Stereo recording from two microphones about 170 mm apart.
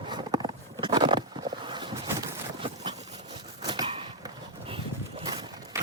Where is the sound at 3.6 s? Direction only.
25° right (ahead or behind).